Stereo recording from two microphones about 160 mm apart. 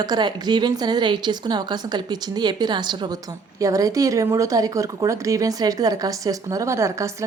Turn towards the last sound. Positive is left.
turn(degrees=-20)  # may be behind; listen again after turning